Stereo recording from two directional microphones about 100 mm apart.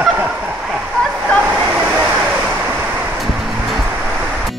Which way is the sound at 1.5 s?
15° right (ahead or behind).